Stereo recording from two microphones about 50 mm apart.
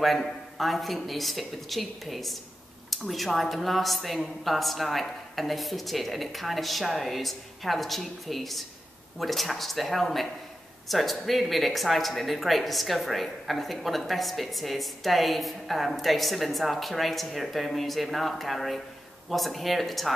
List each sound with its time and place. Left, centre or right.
0.0 s speech: centre